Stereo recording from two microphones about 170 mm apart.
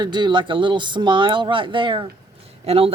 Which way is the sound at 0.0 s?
25° right (ahead or behind).